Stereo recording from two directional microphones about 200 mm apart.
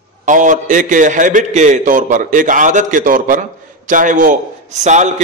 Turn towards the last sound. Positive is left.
turn(degrees=-35)  # may be behind; listen again after turning